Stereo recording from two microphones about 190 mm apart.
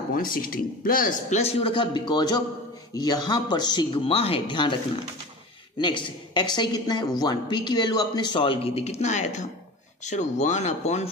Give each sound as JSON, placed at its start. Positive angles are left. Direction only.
{"t": 0.1, "sound": "speech", "side_deg": 45}
{"t": 5.8, "sound": "a man's voice", "side_deg": 25}